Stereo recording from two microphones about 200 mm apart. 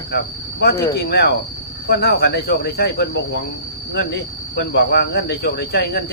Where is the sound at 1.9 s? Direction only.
50° left (ahead or behind).